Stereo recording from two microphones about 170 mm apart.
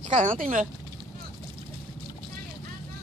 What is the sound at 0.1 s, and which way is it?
Speech, 50° right (ahead or behind).